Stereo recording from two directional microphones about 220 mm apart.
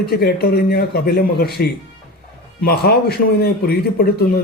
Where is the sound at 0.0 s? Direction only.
45° left (ahead or behind).